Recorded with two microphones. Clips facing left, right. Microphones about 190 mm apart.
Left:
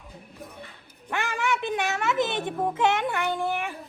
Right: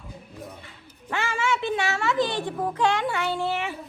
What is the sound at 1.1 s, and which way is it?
A child's voice, 15° left (ahead or behind).